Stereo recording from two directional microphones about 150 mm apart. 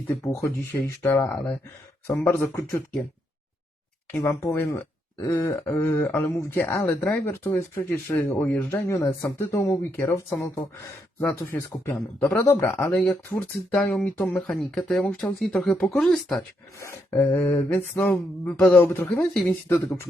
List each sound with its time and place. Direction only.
0.2 s speech: 20° left (ahead or behind)
4.1 s speech: 20° left (ahead or behind)
12.8 s speech: 5° left (ahead or behind)
16.8 s speech: 15° left (ahead or behind)